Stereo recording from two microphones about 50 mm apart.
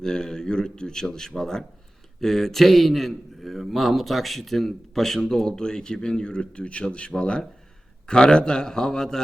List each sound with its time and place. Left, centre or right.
0.0 s a man's voice: centre